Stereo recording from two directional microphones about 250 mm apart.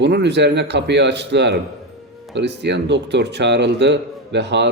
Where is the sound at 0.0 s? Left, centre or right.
Right.